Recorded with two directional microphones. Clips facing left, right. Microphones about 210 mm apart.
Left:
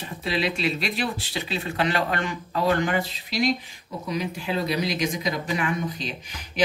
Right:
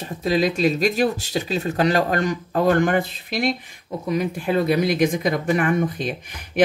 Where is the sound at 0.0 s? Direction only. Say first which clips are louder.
Right 6 dB; 40° right (ahead or behind).